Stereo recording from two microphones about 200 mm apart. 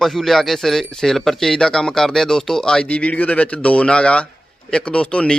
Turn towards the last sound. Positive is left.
turn(degrees=5)  # may be behind; listen again after turning